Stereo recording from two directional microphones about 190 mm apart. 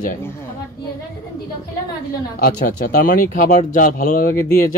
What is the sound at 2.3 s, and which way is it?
Speech, 50° left (ahead or behind).